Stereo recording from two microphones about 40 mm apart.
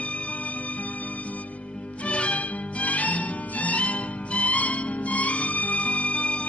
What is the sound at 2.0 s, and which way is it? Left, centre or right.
Music, left.